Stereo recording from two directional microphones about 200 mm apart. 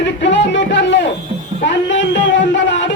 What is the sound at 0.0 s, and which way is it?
Music, 60° left (ahead or behind).